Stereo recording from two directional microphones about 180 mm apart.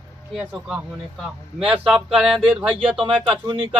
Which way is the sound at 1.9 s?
5° right (ahead or behind).